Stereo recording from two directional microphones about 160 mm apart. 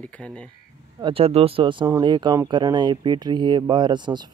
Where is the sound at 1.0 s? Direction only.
35° right (ahead or behind).